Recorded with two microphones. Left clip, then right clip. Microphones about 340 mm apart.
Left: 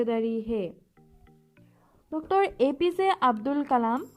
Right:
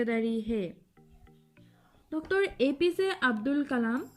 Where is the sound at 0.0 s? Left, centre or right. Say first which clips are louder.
Left 3 dB; left.